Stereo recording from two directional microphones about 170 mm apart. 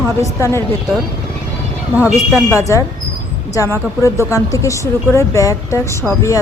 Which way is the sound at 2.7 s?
15° left (ahead or behind).